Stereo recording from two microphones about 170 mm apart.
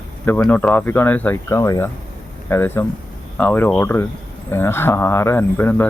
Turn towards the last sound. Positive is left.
turn(degrees=10)  # may be behind; listen again after turning